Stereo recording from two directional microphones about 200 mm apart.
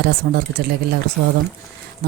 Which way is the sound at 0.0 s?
50° right (ahead or behind).